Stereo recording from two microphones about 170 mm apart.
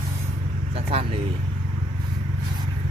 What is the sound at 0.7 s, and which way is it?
Speech, 35° right (ahead or behind).